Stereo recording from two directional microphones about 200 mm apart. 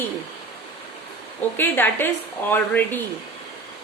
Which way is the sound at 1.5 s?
10° left (ahead or behind).